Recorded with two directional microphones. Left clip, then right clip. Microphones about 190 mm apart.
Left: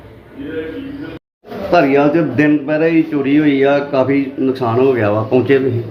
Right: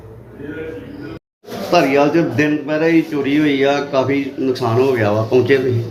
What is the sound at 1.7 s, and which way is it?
A man's voice, 45° left (ahead or behind).